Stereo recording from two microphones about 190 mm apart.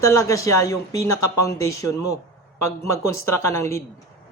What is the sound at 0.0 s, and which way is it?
Speech, 15° left (ahead or behind).